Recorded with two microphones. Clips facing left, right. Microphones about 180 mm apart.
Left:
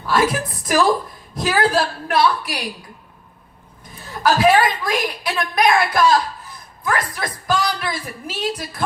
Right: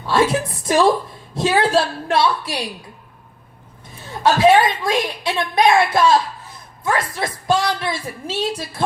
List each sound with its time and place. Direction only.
0.1 s a woman's voice: 25° right (ahead or behind)
4.0 s a woman's voice: 25° right (ahead or behind)